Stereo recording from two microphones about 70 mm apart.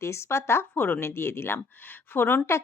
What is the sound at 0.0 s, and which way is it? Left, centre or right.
Speech, left.